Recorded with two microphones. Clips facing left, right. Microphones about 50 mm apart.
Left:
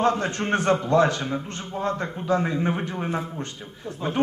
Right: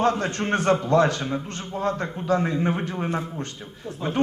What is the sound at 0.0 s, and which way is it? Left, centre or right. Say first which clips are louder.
Speech: even; centre.